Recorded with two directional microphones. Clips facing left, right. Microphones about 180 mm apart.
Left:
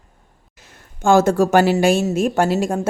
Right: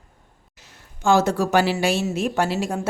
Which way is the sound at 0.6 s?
50° left (ahead or behind).